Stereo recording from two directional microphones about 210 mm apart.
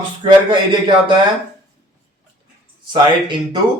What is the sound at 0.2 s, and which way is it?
Speech, 25° right (ahead or behind).